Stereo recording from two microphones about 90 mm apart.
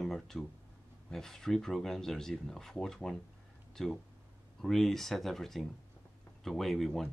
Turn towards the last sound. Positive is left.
turn(degrees=0)  # may be behind; listen again after turning